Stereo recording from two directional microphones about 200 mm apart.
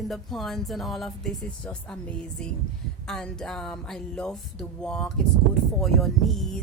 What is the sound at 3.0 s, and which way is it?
Speech, 5° left (ahead or behind).